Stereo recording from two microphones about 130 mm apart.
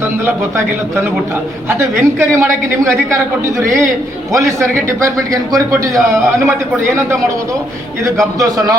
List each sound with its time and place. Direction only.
0.3 s a woman's voice: 20° right (ahead or behind)
8.4 s a woman's voice: 30° right (ahead or behind)